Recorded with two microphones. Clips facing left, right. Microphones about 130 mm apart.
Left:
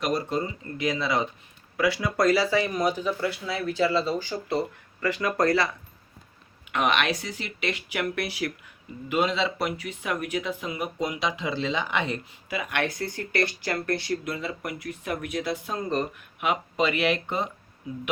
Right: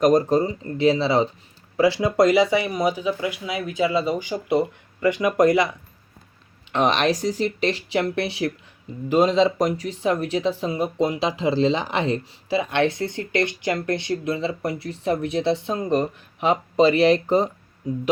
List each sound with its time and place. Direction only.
0.0 s speech: 45° right (ahead or behind); by 5.6 s 20° right (ahead or behind)
6.7 s speech: 35° right (ahead or behind)
9.0 s speech: 35° right (ahead or behind); by 16.5 s 20° right (ahead or behind)
16.5 s speech: 35° right (ahead or behind)